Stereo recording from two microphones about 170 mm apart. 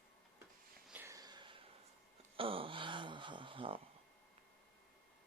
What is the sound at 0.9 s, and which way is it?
Sniff, 15° right (ahead or behind).